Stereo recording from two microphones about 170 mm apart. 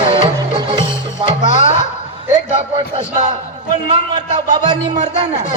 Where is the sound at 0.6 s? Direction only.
30° right (ahead or behind).